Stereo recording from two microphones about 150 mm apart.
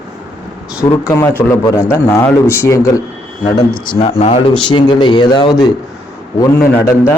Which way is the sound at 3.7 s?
30° left (ahead or behind).